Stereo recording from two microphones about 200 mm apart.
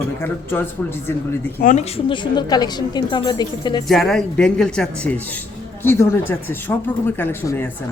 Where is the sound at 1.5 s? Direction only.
40° left (ahead or behind); by 3.8 s 20° left (ahead or behind).